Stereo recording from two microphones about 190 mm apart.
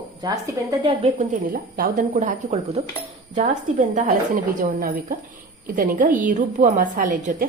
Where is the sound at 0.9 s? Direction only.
35° right (ahead or behind).